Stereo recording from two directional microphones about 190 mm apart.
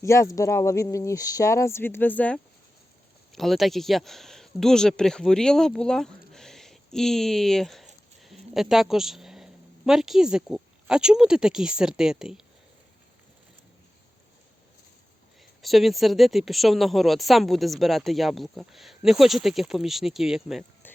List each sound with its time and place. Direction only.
0.0 s speech: 15° left (ahead or behind); by 12.4 s 5° right (ahead or behind)
15.6 s speech: centre (ahead or behind)